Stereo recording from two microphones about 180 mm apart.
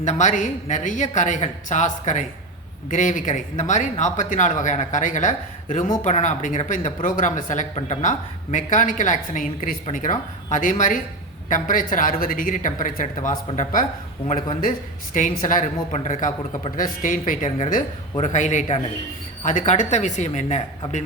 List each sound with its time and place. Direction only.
0.0 s speech: 40° left (ahead or behind)
15.1 s speech: 45° left (ahead or behind)